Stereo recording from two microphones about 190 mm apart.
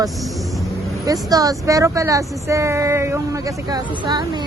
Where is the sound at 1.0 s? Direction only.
20° right (ahead or behind).